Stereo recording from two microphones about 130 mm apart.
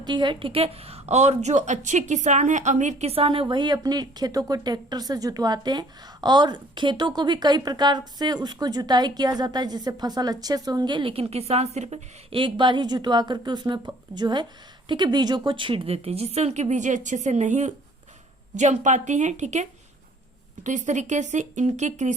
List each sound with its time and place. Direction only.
0.0 s a woman's voice: 35° right (ahead or behind); by 12.0 s 55° right (ahead or behind)
12.3 s a woman's voice: 40° right (ahead or behind); by 19.6 s 65° right (ahead or behind)
20.7 s speech: 70° right (ahead or behind)